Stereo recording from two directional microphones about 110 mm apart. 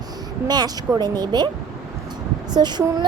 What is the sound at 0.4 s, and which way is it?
A woman's voice, 40° right (ahead or behind).